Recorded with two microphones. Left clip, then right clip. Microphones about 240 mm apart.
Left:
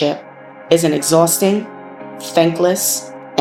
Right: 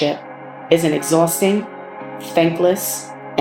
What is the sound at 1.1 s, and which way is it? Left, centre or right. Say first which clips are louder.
Speech: left 3 dB; left.